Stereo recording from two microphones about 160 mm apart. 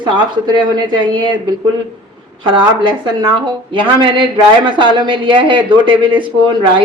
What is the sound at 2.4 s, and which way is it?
Speech, 30° right (ahead or behind).